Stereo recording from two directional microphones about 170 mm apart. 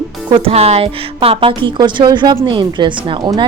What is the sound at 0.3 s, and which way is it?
A woman's voice, 30° right (ahead or behind).